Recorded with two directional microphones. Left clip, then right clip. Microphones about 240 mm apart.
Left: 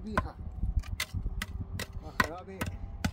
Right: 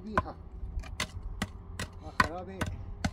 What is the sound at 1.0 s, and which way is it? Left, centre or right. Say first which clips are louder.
Chop: right 1 dB; centre.